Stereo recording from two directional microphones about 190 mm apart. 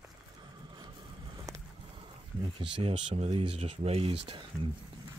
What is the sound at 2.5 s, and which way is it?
Speech, 25° right (ahead or behind).